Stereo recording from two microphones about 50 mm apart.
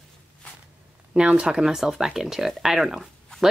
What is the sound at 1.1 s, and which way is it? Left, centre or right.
Speech, centre.